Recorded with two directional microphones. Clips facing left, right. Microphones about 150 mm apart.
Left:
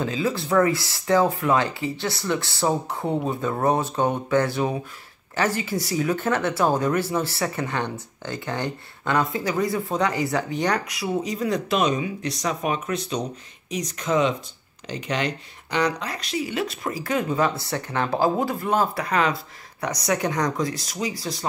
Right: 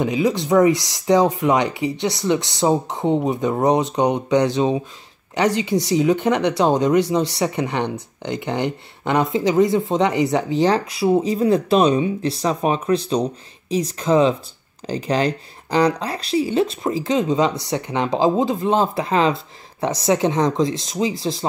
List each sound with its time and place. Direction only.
0.0 s speech: 15° right (ahead or behind)